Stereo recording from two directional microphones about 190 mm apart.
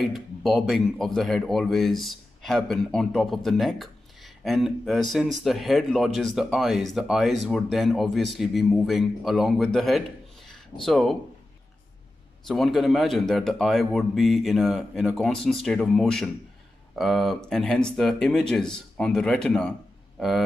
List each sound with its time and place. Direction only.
0.0 s speech: centre (ahead or behind)
12.4 s speech: centre (ahead or behind)
20.2 s a sound: centre (ahead or behind)